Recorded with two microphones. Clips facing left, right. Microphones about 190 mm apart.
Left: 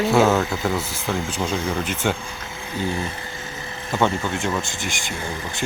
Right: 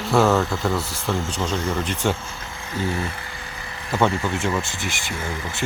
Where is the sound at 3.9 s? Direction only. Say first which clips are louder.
Right 1 dB; centre (ahead or behind).